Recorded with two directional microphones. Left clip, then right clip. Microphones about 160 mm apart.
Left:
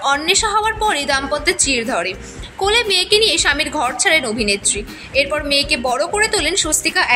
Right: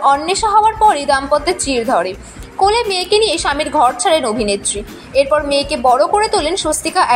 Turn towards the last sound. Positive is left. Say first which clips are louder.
# right 3 dB
turn(degrees=-15)  # may be behind; listen again after turning